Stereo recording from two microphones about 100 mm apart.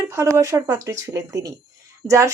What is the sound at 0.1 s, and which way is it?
Speech, 25° right (ahead or behind).